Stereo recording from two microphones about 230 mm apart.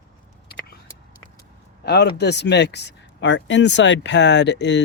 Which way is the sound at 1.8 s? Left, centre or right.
Left.